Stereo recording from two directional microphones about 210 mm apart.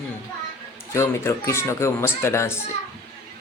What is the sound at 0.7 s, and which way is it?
Speech, 10° left (ahead or behind).